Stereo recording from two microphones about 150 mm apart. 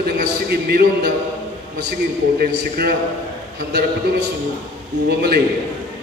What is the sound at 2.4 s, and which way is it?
Speech, 90° right.